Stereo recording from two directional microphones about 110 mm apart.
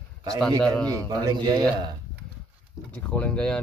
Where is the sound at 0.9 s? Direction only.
35° right (ahead or behind).